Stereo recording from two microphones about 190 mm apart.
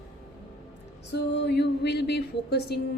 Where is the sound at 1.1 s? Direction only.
65° left (ahead or behind).